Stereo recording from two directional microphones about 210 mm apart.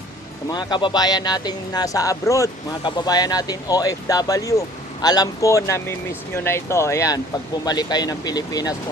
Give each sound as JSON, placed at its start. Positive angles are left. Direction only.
{"t": 0.5, "sound": "speech", "side_deg": 20}